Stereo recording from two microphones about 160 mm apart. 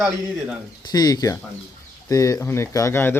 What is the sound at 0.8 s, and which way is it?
Speech, 25° left (ahead or behind).